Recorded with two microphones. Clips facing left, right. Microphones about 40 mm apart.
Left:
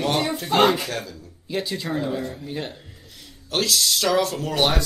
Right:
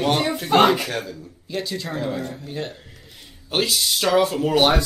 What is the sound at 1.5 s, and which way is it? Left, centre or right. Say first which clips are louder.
Speech: left 1 dB; centre.